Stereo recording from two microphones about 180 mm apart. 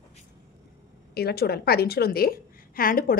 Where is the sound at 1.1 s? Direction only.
60° left (ahead or behind).